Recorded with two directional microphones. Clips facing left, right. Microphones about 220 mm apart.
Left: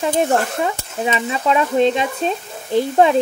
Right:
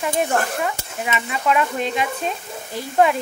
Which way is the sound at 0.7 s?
30° left (ahead or behind).